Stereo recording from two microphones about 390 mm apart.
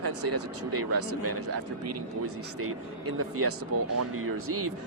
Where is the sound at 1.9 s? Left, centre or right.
Right.